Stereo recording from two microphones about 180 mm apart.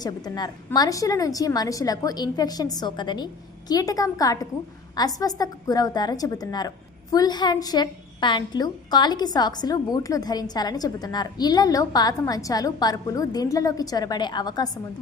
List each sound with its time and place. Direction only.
0.0 s a woman's voice: 20° left (ahead or behind)